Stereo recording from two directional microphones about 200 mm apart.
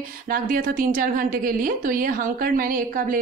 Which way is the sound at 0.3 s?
45° right (ahead or behind).